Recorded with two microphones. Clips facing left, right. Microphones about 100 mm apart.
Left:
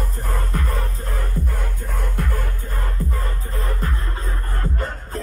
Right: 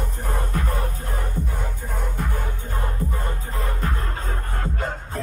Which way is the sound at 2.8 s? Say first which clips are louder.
Even; 30° right (ahead or behind).